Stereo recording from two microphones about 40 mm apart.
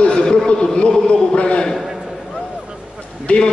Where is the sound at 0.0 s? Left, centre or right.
Left.